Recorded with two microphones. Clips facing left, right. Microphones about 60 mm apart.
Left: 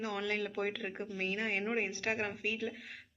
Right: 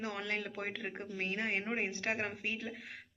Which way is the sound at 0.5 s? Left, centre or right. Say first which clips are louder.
Left 4 dB; centre.